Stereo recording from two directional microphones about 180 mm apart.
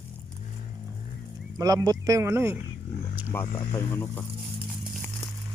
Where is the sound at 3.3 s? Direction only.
15° left (ahead or behind).